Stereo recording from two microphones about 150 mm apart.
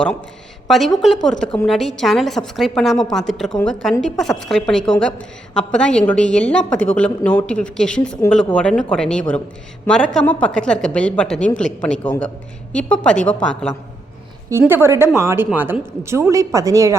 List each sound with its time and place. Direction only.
0.7 s a woman's voice: centre (ahead or behind)
14.7 s a woman's voice: 15° right (ahead or behind)